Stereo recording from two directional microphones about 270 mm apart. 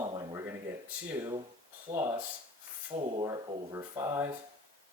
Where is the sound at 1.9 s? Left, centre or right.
Right.